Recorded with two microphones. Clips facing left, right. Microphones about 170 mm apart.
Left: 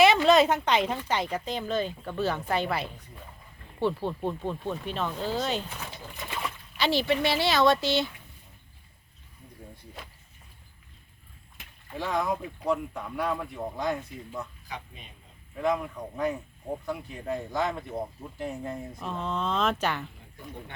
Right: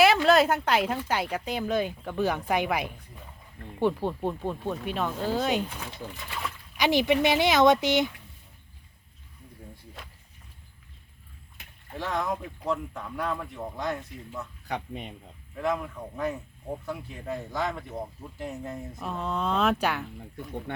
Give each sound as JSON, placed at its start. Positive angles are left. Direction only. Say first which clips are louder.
{"t": 0.0, "sound": "a woman's voice", "louder": "even", "side_deg": -5}
{"t": 10.0, "sound": "vehicle", "louder": "left 3 dB", "side_deg": 5}
{"t": 11.9, "sound": "speech", "louder": "left 1 dB", "side_deg": 5}
{"t": 14.7, "sound": "speech", "louder": "right 8 dB", "side_deg": -60}
{"t": 15.5, "sound": "speech", "louder": "left 1 dB", "side_deg": 0}